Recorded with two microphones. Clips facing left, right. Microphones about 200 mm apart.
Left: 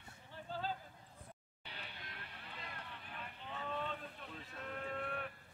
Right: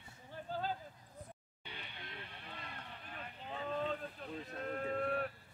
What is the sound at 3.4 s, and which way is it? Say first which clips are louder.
Livestock: right 5 dB; 40° right (ahead or behind).